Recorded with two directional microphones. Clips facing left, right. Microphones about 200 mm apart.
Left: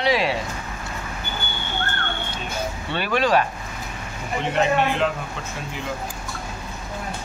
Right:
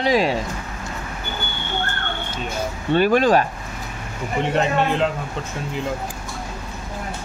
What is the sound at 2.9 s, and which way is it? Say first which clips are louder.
Speech: right 5 dB; 45° right (ahead or behind).